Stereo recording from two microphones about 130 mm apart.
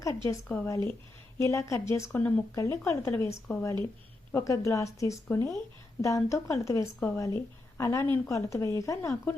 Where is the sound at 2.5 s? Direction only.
25° left (ahead or behind).